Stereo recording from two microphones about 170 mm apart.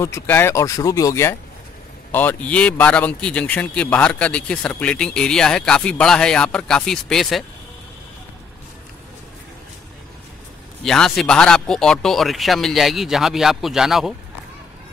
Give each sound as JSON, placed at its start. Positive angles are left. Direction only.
{"t": 0.0, "sound": "a man's voice", "side_deg": 15}
{"t": 10.8, "sound": "speech", "side_deg": 5}